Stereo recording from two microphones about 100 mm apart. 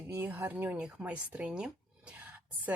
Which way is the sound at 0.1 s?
20° right (ahead or behind).